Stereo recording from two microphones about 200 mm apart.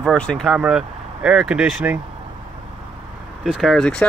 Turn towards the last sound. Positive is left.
turn(degrees=5)  # may be behind; listen again after turning